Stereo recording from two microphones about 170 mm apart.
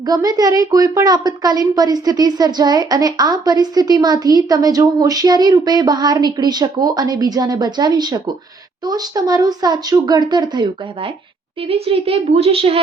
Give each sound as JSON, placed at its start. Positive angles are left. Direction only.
{"t": 0.0, "sound": "a woman's voice", "side_deg": -20}